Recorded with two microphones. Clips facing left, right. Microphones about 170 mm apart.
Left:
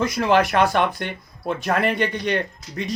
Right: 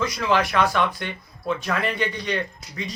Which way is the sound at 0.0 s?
50° left (ahead or behind).